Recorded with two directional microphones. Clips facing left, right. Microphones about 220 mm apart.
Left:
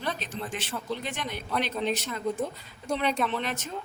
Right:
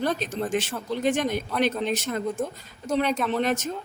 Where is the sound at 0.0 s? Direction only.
45° right (ahead or behind).